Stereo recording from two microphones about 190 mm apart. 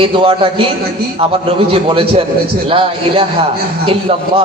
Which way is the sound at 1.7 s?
30° right (ahead or behind).